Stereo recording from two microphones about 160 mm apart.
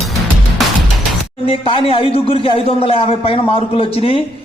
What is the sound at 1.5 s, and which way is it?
A man's voice, 35° left (ahead or behind).